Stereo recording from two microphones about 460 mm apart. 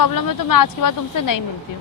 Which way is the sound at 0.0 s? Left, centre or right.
Left.